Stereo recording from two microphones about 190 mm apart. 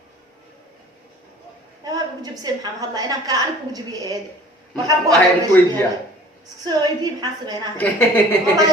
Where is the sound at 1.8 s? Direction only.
20° right (ahead or behind).